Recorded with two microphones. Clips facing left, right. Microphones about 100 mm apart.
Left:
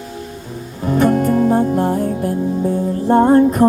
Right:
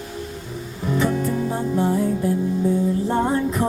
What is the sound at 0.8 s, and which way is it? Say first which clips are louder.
Music: left 7 dB; 50° left (ahead or behind).